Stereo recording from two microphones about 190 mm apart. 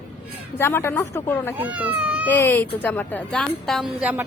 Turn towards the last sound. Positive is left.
turn(degrees=-5)  # may be behind; listen again after turning